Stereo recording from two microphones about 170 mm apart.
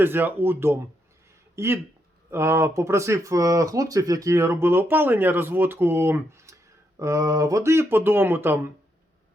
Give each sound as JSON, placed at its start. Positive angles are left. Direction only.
{"t": 0.0, "sound": "speech", "side_deg": -10}